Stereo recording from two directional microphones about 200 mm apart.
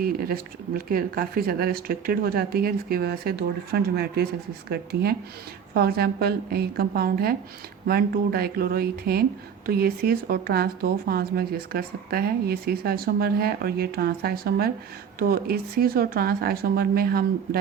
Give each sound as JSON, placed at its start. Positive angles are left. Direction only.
{"t": 0.0, "sound": "speech", "side_deg": -45}